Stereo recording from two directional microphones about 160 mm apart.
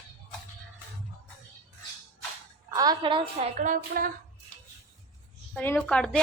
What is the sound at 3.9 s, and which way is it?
Speech, 70° right (ahead or behind).